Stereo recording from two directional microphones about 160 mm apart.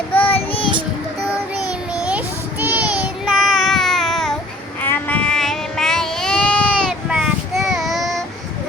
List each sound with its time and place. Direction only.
0.1 s child singing: 10° left (ahead or behind)
0.3 s child singing: 35° left (ahead or behind)
1.5 s child singing: 5° right (ahead or behind)